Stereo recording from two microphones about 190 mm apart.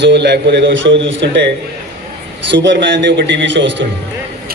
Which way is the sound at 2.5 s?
70° right (ahead or behind).